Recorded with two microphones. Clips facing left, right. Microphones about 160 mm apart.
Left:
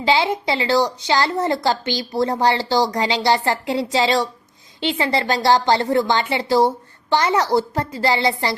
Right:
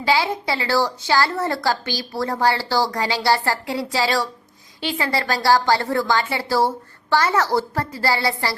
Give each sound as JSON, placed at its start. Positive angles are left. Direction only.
{"t": 0.0, "sound": "a woman's voice", "side_deg": 20}